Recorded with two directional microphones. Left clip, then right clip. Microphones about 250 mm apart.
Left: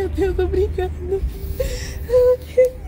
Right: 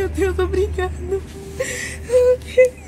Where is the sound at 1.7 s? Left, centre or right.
Centre.